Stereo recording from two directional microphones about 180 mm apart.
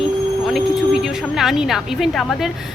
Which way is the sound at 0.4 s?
Centre (ahead or behind).